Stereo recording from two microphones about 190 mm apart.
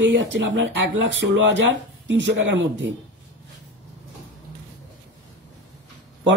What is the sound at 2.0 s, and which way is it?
Speech, 70° right (ahead or behind).